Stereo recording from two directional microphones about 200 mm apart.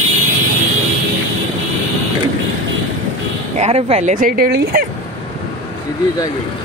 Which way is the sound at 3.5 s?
30° right (ahead or behind).